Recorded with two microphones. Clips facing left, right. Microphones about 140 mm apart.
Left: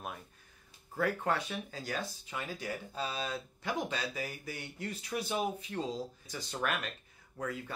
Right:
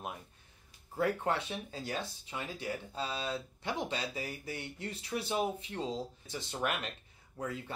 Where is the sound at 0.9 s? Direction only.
25° right (ahead or behind).